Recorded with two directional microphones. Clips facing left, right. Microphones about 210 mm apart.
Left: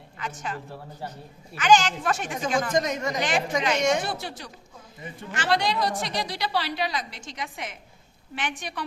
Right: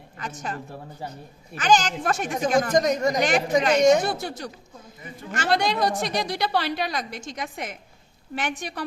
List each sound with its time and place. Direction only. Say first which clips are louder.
0.2 s a woman's voice: right 1 dB; 40° right (ahead or behind)